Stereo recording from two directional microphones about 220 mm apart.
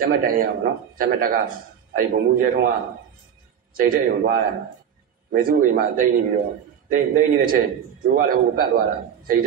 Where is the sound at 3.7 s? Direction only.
40° right (ahead or behind).